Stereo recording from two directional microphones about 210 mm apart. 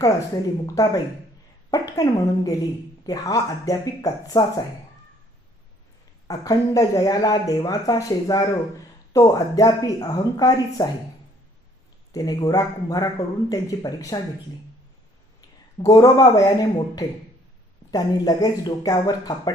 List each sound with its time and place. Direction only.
1.7 s speech: 15° left (ahead or behind)
6.2 s speech: 15° left (ahead or behind)
12.1 s speech: 15° left (ahead or behind)
15.4 s speech: 15° left (ahead or behind)